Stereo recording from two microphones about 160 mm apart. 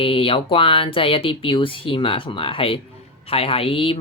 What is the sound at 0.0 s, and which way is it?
Speech, 35° left (ahead or behind).